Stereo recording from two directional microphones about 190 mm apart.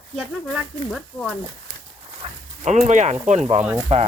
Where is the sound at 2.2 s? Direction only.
35° right (ahead or behind).